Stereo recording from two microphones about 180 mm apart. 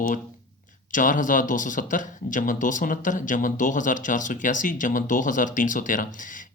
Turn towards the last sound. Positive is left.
turn(degrees=45)  # may be behind; listen again after turning